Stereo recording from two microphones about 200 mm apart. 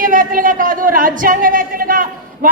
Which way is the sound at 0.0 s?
45° right (ahead or behind).